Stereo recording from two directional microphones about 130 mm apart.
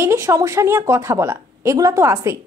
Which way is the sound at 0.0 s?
20° right (ahead or behind).